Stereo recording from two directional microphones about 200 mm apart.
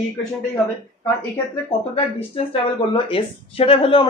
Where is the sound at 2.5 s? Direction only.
25° left (ahead or behind).